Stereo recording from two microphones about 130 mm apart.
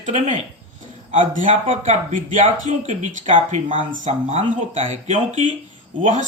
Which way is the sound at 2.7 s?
70° right (ahead or behind).